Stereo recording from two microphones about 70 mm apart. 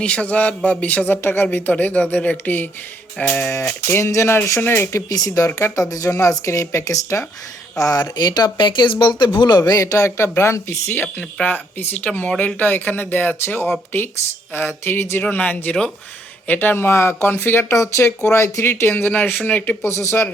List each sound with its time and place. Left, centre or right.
0.0 s speech: centre
3.9 s speech: left
5.0 s speech: left
5.5 s speech: left
5.8 s speech: left
9.8 s speech: left
10.9 s speech: left
15.2 s speech: left
19.1 s speech: left
19.8 s speech: left